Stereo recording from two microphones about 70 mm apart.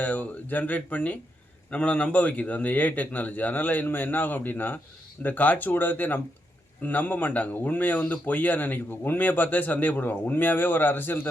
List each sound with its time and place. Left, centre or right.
0.0 s speech: left